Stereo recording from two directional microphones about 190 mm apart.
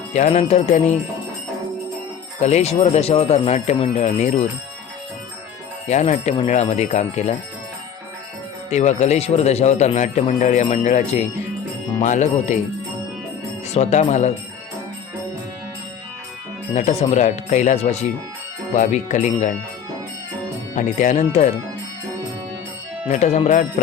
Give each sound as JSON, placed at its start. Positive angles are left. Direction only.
{"t": 0.1, "sound": "a man's voice", "side_deg": 35}
{"t": 2.4, "sound": "a man's voice", "side_deg": 35}
{"t": 5.9, "sound": "a man's voice", "side_deg": 35}
{"t": 8.7, "sound": "a man's voice", "side_deg": 35}
{"t": 13.7, "sound": "a man's voice", "side_deg": 40}
{"t": 16.7, "sound": "a man's voice", "side_deg": 35}
{"t": 20.7, "sound": "a man's voice", "side_deg": 40}
{"t": 23.0, "sound": "a man's voice", "side_deg": 35}